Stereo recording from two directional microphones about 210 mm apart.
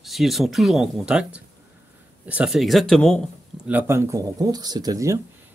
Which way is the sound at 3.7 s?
10° right (ahead or behind).